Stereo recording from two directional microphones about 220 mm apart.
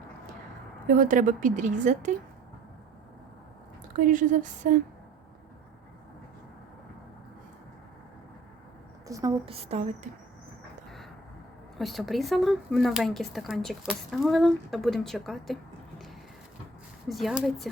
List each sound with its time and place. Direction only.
0.9 s speech: 35° right (ahead or behind)
3.9 s speech: 35° right (ahead or behind)
9.0 s a woman's voice: 15° right (ahead or behind)
9.5 s speech: 30° right (ahead or behind)
11.8 s speech: centre (ahead or behind)
17.1 s speech: centre (ahead or behind)